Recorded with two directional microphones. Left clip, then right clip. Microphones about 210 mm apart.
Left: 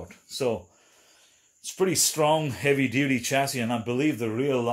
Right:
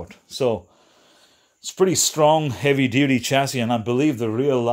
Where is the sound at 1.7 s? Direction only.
50° right (ahead or behind).